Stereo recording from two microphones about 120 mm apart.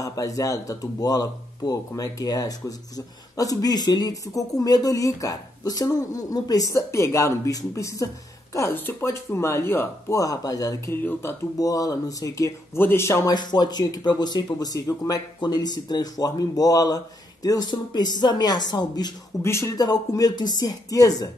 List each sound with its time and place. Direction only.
0.0 s speech: 30° left (ahead or behind)
11.0 s speech: 15° left (ahead or behind)
11.5 s speech: 30° left (ahead or behind)
13.3 s speech: 35° left (ahead or behind)
19.4 s speech: 25° left (ahead or behind)